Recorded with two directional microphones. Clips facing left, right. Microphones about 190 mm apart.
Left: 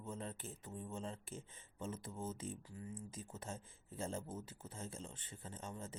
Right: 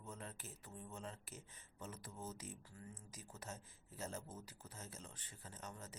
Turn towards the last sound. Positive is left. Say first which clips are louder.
# left 5 dB
turn(degrees=25)  # may be behind; listen again after turning